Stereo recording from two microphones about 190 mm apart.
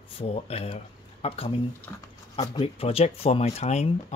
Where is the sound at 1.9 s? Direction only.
10° left (ahead or behind).